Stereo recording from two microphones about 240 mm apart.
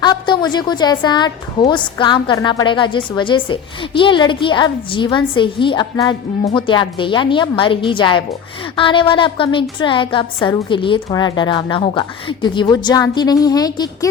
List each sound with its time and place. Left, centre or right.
0.0 s a woman's voice: centre